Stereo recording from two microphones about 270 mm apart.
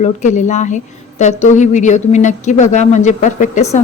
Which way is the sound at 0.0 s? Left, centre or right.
Left.